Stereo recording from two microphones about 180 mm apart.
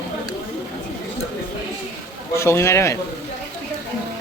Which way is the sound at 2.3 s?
15° left (ahead or behind).